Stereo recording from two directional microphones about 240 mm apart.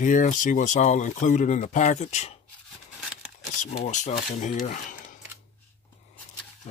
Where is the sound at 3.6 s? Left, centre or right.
Left.